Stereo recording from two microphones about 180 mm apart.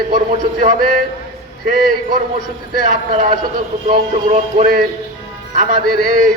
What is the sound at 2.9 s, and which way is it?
A man's voice, 40° right (ahead or behind).